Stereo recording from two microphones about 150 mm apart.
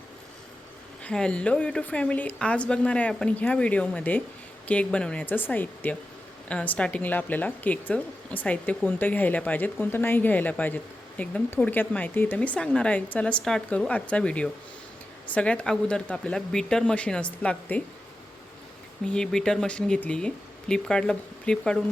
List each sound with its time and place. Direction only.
1.0 s speech: 5° left (ahead or behind)
19.0 s speech: 5° left (ahead or behind)